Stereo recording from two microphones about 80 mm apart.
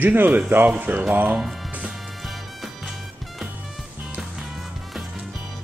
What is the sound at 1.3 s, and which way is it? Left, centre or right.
Speech, centre.